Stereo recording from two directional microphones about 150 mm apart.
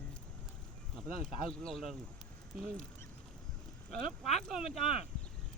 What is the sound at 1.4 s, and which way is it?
Speech, 5° left (ahead or behind).